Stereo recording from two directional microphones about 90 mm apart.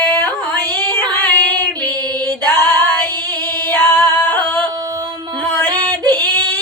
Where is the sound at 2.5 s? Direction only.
25° left (ahead or behind).